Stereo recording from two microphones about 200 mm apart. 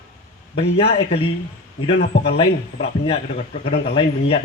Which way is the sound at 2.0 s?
55° left (ahead or behind).